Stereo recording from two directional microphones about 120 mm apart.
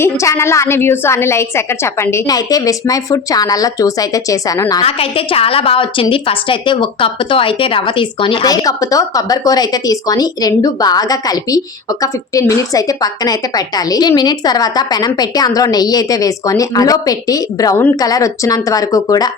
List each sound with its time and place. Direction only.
0.0 s a woman's voice: 25° left (ahead or behind)
4.8 s a woman's voice: 55° left (ahead or behind); by 19.3 s 30° left (ahead or behind)